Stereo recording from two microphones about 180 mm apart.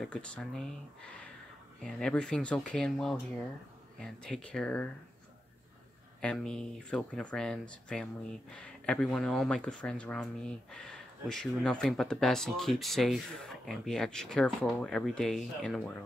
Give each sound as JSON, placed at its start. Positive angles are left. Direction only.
{"t": 0.0, "sound": "speech", "side_deg": 5}
{"t": 6.2, "sound": "speech", "side_deg": 5}